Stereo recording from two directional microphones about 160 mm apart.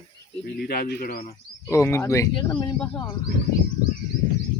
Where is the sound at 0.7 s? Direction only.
80° left.